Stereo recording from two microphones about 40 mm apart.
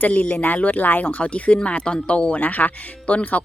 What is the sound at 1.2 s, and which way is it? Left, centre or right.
Speech, left.